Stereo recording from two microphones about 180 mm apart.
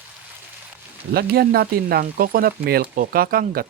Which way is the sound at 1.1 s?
60° right (ahead or behind).